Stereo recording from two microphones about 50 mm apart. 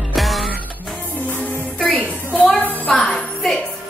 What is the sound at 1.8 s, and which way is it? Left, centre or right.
Music, left.